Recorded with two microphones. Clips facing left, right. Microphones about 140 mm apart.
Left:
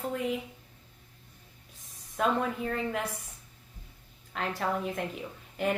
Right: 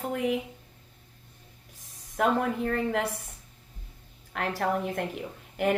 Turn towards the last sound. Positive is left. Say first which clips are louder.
# right 4 dB
turn(degrees=-60)  # may be behind; listen again after turning